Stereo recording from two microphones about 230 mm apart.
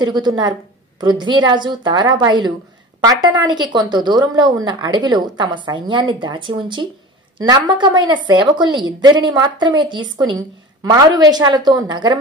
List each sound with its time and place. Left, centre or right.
0.0 s a woman's voice: centre